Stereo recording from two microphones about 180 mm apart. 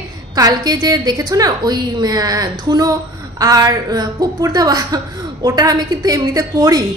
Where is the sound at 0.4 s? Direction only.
20° right (ahead or behind).